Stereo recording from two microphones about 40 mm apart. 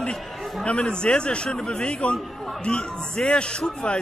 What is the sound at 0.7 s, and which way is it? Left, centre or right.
Speech, left.